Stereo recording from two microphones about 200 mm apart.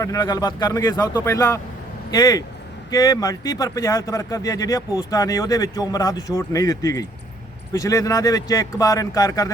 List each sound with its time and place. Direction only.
0.0 s speech: 15° left (ahead or behind)